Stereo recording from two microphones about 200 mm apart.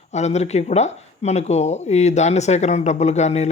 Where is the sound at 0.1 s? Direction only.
35° left (ahead or behind).